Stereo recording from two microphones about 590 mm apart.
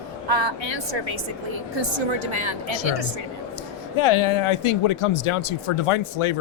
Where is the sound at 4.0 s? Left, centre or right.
Left.